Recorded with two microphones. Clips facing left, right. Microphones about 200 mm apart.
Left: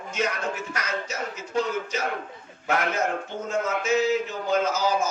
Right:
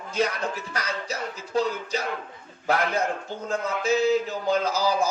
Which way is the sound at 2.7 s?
35° right (ahead or behind).